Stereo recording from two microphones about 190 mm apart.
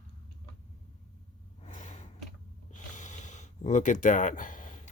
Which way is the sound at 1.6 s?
40° left (ahead or behind).